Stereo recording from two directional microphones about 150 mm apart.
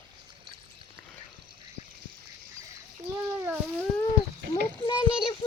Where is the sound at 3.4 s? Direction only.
10° right (ahead or behind).